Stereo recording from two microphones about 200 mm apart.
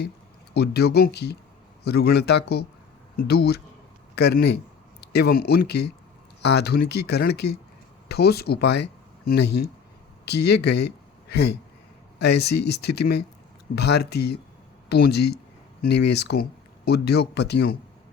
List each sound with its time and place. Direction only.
0.5 s speech: 55° left (ahead or behind)